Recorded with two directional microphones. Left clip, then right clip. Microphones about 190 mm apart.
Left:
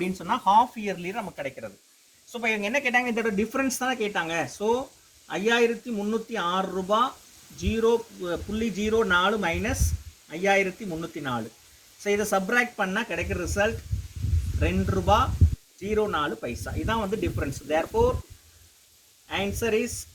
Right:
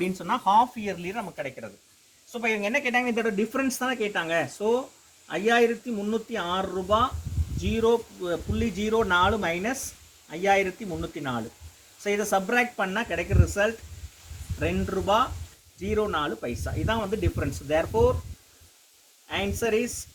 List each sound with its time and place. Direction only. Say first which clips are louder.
0.0 s speech: even; 10° left (ahead or behind)
19.3 s speech: even; 15° left (ahead or behind)